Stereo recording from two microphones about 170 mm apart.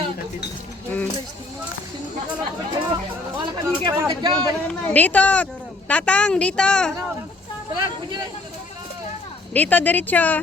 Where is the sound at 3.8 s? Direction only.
25° right (ahead or behind).